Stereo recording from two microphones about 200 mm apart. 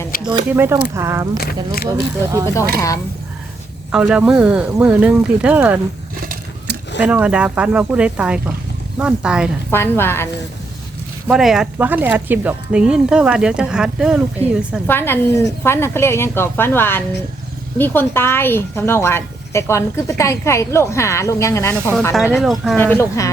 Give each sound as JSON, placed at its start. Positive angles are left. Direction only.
{"t": 0.5, "sound": "speech", "side_deg": -10}
{"t": 1.4, "sound": "speech", "side_deg": 50}
{"t": 3.9, "sound": "speech", "side_deg": -5}
{"t": 7.0, "sound": "speech", "side_deg": -5}
{"t": 9.6, "sound": "a woman's voice", "side_deg": 10}
{"t": 11.3, "sound": "speech", "side_deg": 0}
{"t": 14.8, "sound": "a woman's voice", "side_deg": 10}
{"t": 22.1, "sound": "speech", "side_deg": 0}
{"t": 22.8, "sound": "a woman's voice", "side_deg": 10}